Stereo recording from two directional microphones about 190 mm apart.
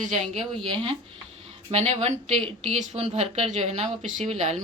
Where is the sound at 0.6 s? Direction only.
25° right (ahead or behind).